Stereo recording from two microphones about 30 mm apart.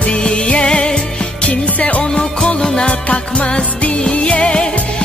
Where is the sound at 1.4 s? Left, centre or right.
Left.